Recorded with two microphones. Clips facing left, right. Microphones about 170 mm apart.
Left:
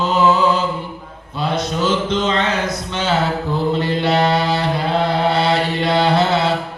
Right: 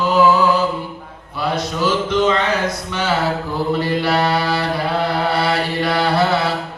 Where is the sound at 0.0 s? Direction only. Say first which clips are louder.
Right 1 dB; 20° left (ahead or behind).